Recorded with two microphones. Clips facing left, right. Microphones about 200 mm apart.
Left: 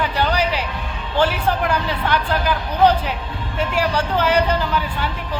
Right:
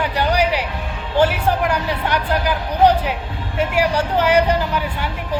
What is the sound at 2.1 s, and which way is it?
Speech, 15° right (ahead or behind).